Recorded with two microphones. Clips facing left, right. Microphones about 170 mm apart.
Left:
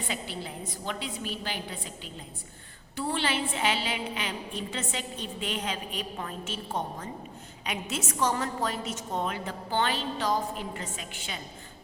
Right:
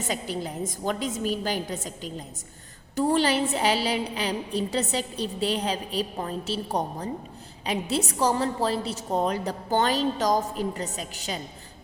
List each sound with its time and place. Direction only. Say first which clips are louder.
0.0 s a woman's voice: right 6 dB; 40° right (ahead or behind)